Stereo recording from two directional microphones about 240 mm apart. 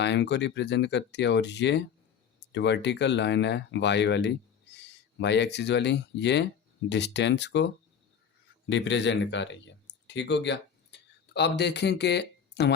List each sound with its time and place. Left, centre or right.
0.0 s speech: left
8.7 s speech: left